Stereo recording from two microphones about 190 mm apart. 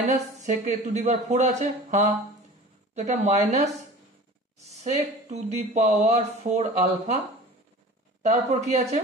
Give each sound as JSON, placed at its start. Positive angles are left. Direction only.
{"t": 0.4, "sound": "speech", "side_deg": -40}
{"t": 4.6, "sound": "speech", "side_deg": -35}
{"t": 8.2, "sound": "speech", "side_deg": -35}